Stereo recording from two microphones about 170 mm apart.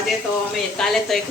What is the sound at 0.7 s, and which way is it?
Speech, centre (ahead or behind).